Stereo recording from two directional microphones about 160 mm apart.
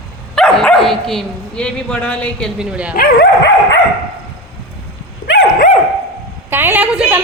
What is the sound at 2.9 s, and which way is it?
Speech, 70° left (ahead or behind).